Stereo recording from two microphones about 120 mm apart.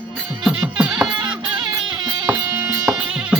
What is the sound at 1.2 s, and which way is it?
Music, 40° right (ahead or behind).